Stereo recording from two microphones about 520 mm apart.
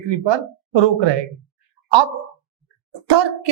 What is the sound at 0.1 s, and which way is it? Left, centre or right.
Speech, right.